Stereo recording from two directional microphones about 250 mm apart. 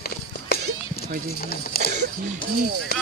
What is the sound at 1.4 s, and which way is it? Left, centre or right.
Speech, left.